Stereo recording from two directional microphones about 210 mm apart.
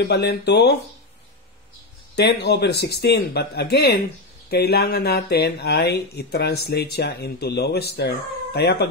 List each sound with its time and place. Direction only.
0.0 s speech: 50° left (ahead or behind)
2.1 s speech: 50° left (ahead or behind)